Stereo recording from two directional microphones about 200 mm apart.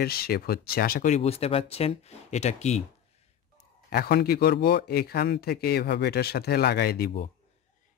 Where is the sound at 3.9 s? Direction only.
50° left (ahead or behind).